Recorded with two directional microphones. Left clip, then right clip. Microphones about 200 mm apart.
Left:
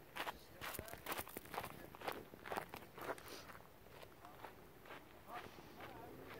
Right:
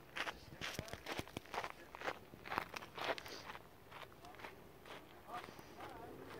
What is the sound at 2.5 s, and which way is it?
Biting, 30° right (ahead or behind).